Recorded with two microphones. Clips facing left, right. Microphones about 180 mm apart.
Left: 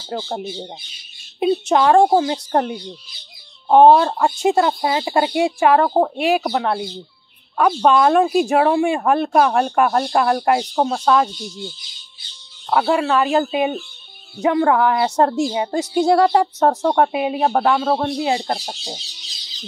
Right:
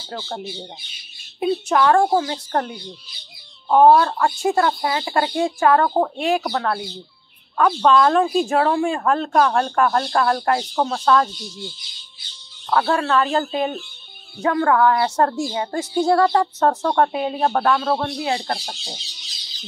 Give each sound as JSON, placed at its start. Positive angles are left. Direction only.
{"t": 0.1, "sound": "speech", "side_deg": 20}
{"t": 12.6, "sound": "speech", "side_deg": 15}